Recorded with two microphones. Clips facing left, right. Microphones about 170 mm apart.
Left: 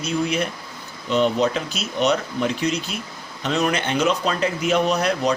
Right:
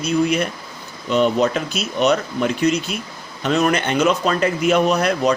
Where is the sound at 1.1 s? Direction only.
55° right (ahead or behind).